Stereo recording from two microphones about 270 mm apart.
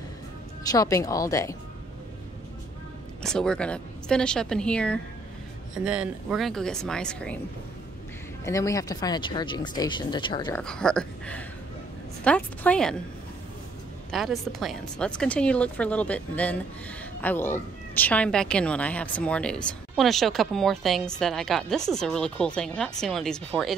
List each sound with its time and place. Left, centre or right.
0.7 s speech: centre
3.2 s speech: centre
8.5 s speech: centre
10.6 s speech: centre
14.1 s speech: centre